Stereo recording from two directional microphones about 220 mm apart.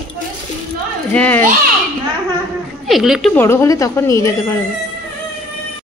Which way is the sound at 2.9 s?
Centre (ahead or behind).